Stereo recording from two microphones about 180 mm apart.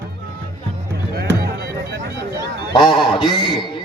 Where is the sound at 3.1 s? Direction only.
30° left (ahead or behind).